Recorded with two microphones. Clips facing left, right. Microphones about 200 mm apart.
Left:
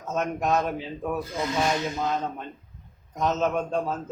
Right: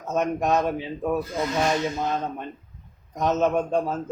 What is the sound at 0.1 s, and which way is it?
Speech, 15° right (ahead or behind).